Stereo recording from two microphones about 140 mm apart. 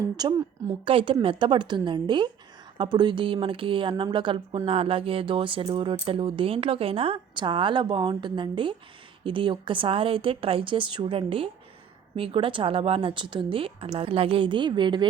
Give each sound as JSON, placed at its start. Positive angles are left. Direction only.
{"t": 0.2, "sound": "a woman's voice", "side_deg": -30}
{"t": 0.9, "sound": "speech", "side_deg": -40}